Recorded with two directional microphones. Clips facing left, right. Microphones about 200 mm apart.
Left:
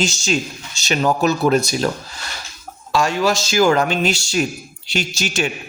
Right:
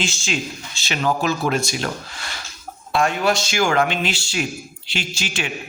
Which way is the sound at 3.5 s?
40° left (ahead or behind).